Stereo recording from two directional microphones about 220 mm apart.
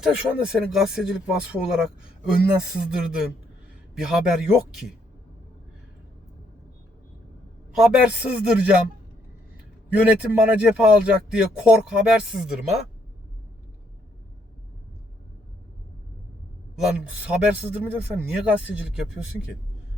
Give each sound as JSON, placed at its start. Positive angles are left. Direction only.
{"t": 0.0, "sound": "speech", "side_deg": -5}
{"t": 7.8, "sound": "speech", "side_deg": -5}
{"t": 9.9, "sound": "speech", "side_deg": -5}
{"t": 16.7, "sound": "speech", "side_deg": -5}